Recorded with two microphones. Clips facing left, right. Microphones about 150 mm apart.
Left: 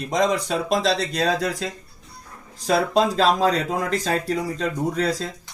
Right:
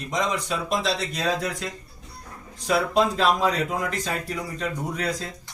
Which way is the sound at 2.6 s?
35° left (ahead or behind).